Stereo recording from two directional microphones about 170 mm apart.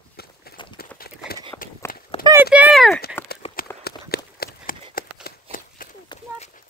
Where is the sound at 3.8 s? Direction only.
65° left (ahead or behind).